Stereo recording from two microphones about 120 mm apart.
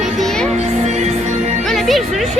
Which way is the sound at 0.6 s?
70° right (ahead or behind).